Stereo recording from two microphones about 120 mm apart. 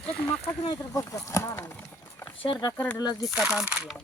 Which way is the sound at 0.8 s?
25° left (ahead or behind).